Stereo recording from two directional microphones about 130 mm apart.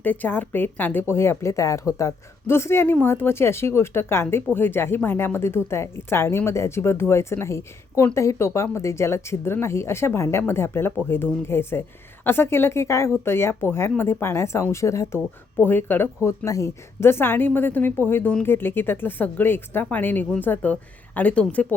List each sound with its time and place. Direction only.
0.0 s a woman's voice: 15° left (ahead or behind)